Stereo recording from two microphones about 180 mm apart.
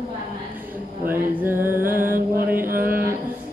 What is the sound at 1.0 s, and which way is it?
Mantra, 10° right (ahead or behind).